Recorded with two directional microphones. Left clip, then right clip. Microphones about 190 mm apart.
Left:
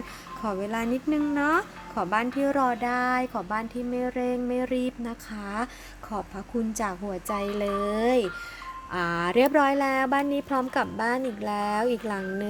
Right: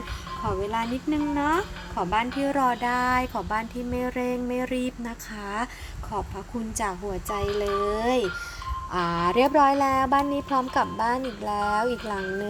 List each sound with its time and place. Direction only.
0.4 s speech: 20° left (ahead or behind)
6.7 s speech: 25° left (ahead or behind)
8.9 s speech: 10° left (ahead or behind)